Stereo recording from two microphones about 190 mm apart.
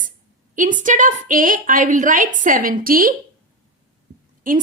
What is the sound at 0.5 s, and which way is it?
A woman's voice, 45° right (ahead or behind).